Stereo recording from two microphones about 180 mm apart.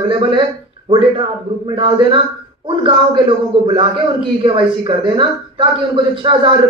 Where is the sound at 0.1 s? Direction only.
30° right (ahead or behind).